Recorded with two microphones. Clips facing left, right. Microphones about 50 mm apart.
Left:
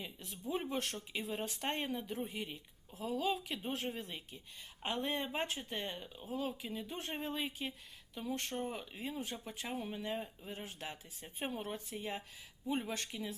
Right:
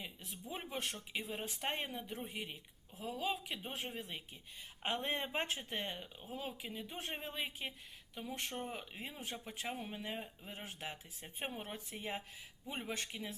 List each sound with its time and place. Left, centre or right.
0.0 s speech: centre
4.8 s speech: right; by 8.9 s centre
9.0 s speech: right